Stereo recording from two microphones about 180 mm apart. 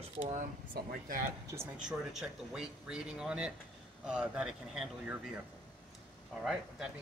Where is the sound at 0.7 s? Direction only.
50° right (ahead or behind).